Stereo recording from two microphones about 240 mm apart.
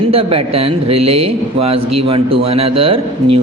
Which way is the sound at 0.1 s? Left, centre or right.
Right.